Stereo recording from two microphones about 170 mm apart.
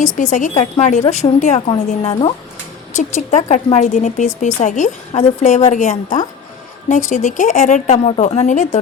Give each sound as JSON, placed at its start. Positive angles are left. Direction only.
{"t": 0.2, "sound": "a woman's voice", "side_deg": 45}
{"t": 2.9, "sound": "a woman's voice", "side_deg": 45}